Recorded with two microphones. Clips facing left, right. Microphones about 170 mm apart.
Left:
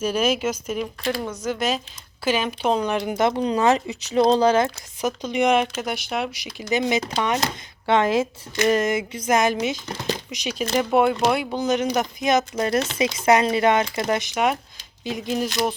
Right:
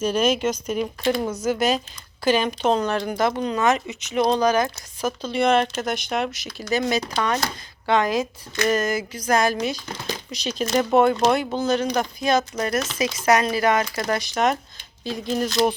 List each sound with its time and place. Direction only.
0.0 s speech: 5° left (ahead or behind)
1.0 s speech: 20° right (ahead or behind)
1.4 s speech: centre (ahead or behind); by 14.3 s 20° left (ahead or behind)
14.3 s speech: 10° left (ahead or behind)